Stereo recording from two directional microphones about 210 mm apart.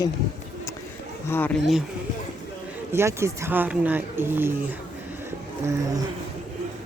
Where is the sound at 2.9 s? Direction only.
10° right (ahead or behind).